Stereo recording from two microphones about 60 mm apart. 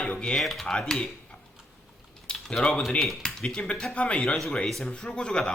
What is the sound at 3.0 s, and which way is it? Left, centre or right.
Speech, centre.